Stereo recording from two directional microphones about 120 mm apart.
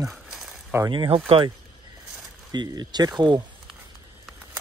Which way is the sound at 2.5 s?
35° right (ahead or behind).